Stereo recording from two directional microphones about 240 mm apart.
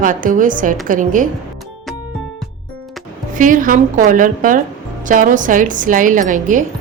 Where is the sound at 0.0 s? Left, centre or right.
Right.